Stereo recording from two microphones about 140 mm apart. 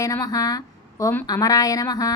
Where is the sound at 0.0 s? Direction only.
25° left (ahead or behind).